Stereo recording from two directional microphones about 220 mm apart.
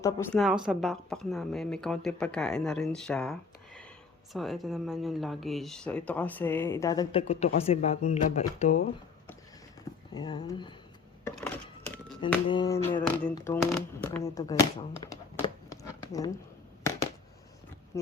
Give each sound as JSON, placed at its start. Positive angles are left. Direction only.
{"t": 0.0, "sound": "speech", "side_deg": 10}
{"t": 0.3, "sound": "speech", "side_deg": -5}
{"t": 10.2, "sound": "speech", "side_deg": 20}
{"t": 12.5, "sound": "speech", "side_deg": 20}
{"t": 17.9, "sound": "a sound", "side_deg": 15}